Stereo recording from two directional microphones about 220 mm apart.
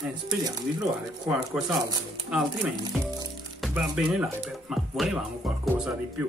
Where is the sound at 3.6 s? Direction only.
5° right (ahead or behind).